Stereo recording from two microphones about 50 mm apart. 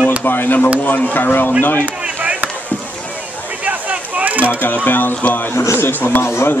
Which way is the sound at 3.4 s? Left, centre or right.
Right.